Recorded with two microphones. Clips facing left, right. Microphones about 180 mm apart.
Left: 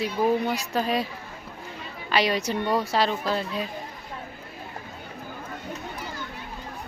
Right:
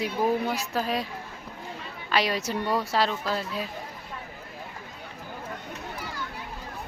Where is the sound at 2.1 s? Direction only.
Centre (ahead or behind).